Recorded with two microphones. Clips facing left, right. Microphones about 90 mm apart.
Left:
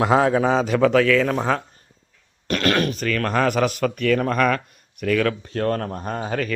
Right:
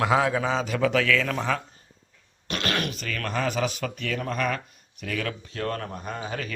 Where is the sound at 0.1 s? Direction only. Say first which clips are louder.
Left 6 dB; 35° left (ahead or behind).